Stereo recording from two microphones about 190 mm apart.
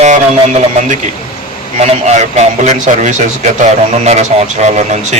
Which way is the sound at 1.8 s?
35° right (ahead or behind).